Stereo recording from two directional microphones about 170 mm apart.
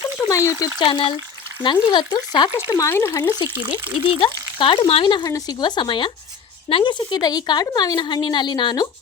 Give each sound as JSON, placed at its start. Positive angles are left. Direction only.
{"t": 0.2, "sound": "a sound", "side_deg": 20}
{"t": 0.6, "sound": "speech", "side_deg": 30}
{"t": 4.1, "sound": "speech", "side_deg": 30}